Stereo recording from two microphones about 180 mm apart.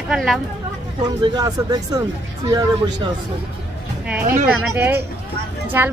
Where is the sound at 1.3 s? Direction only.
20° right (ahead or behind).